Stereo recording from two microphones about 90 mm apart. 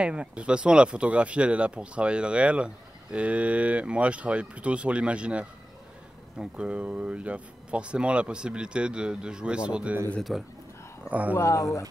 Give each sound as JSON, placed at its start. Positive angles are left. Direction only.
{"t": 0.0, "sound": "speech", "side_deg": -10}
{"t": 10.3, "sound": "speech", "side_deg": 0}
{"t": 11.1, "sound": "speech", "side_deg": -15}
{"t": 11.3, "sound": "speech", "side_deg": 35}